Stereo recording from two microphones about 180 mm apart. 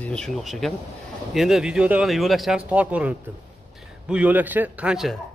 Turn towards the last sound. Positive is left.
turn(degrees=-5)  # may be behind; listen again after turning